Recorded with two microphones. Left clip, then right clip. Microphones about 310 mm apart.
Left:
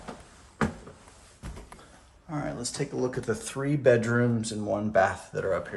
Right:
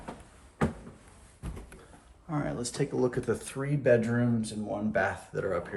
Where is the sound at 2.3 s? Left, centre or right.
Centre.